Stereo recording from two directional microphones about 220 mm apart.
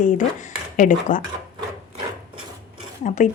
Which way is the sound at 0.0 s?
35° left (ahead or behind).